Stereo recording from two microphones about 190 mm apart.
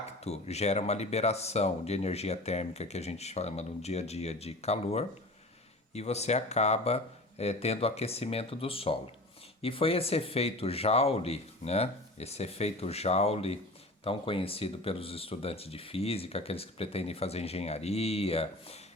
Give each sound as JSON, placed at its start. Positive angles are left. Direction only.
{"t": 0.3, "sound": "speech", "side_deg": 35}